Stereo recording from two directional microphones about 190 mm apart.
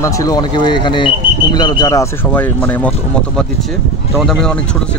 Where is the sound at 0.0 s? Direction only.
20° left (ahead or behind).